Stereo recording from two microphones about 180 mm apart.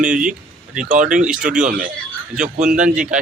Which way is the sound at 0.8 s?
45° right (ahead or behind).